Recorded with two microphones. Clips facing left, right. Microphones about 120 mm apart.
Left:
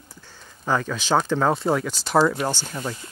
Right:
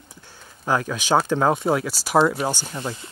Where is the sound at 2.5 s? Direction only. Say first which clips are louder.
Right 1 dB; 15° right (ahead or behind).